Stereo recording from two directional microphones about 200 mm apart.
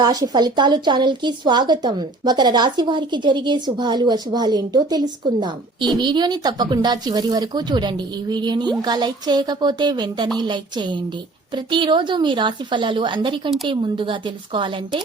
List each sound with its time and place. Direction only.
0.0 s a woman's voice: 20° right (ahead or behind)